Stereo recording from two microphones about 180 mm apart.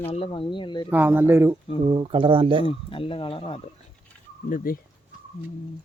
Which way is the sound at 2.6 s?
30° left (ahead or behind).